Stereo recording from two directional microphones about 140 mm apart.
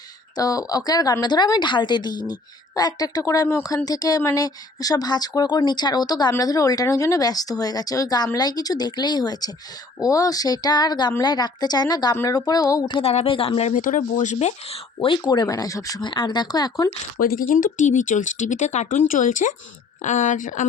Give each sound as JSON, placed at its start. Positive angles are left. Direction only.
{"t": 0.3, "sound": "a woman's voice", "side_deg": 25}
{"t": 13.0, "sound": "speech", "side_deg": 45}
{"t": 13.7, "sound": "speech", "side_deg": 65}
{"t": 17.2, "sound": "speech", "side_deg": 90}